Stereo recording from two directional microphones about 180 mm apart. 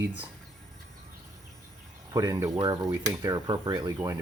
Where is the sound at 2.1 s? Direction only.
15° right (ahead or behind).